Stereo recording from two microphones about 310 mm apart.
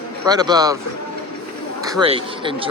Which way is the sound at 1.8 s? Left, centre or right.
Centre.